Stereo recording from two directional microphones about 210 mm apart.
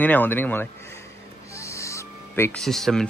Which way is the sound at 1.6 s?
15° left (ahead or behind).